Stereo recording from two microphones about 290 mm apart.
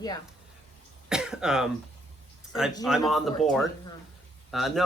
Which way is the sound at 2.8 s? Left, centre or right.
Centre.